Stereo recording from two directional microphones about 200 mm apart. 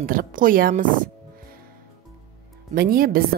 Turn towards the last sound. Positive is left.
turn(degrees=-50)  # may be behind; listen again after turning